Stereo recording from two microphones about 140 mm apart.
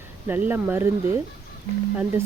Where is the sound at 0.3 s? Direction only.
15° right (ahead or behind).